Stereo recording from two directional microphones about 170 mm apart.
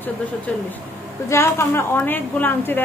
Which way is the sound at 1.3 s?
15° left (ahead or behind).